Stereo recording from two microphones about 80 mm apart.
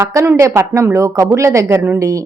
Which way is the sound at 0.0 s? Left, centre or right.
Right.